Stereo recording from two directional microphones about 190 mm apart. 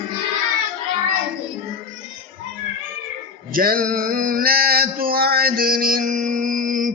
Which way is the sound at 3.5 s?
50° right (ahead or behind).